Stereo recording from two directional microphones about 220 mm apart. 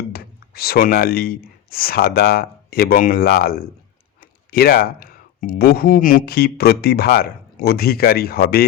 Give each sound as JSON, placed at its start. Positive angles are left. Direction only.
{"t": 0.1, "sound": "speech", "side_deg": 45}